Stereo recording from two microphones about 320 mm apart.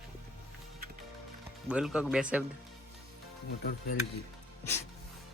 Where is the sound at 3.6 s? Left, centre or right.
Left.